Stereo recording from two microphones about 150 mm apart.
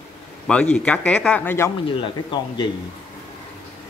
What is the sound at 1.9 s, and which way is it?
Speech, 35° left (ahead or behind).